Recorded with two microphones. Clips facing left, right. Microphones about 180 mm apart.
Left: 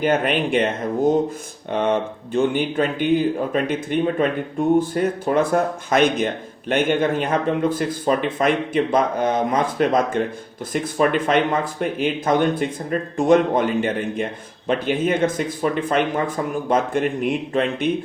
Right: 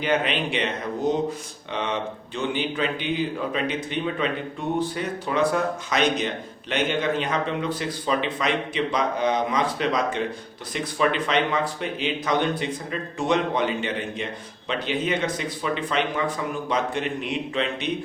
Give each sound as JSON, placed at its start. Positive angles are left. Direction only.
{"t": 0.0, "sound": "speech", "side_deg": 45}